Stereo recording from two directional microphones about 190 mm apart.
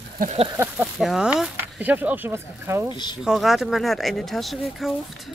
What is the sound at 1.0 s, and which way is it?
Speech, 5° right (ahead or behind).